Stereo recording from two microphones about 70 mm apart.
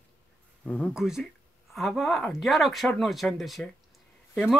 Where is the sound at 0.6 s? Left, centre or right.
Centre.